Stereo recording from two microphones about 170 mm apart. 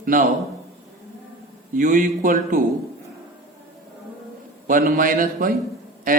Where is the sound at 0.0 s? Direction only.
55° right (ahead or behind).